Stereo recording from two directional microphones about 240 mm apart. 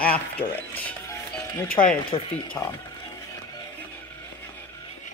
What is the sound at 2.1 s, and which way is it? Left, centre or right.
Speech, left.